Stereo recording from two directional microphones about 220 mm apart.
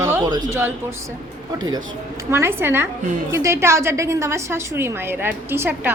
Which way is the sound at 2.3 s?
10° right (ahead or behind).